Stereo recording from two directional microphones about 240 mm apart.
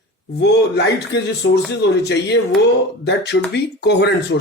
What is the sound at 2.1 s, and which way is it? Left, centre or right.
Speech, left.